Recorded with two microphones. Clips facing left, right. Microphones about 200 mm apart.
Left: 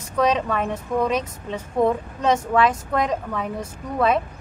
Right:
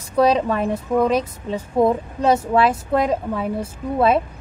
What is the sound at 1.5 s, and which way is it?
Speech, 35° right (ahead or behind).